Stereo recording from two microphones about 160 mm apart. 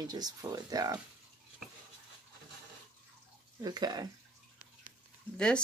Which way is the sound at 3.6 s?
25° right (ahead or behind).